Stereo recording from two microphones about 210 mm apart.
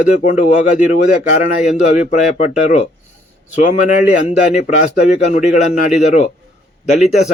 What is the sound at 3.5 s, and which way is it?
A man's voice, 35° left (ahead or behind).